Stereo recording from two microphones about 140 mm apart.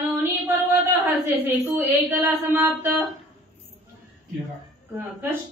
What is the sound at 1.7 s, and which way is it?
A woman's voice, 15° right (ahead or behind).